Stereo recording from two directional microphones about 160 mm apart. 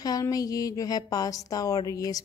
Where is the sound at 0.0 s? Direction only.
25° left (ahead or behind).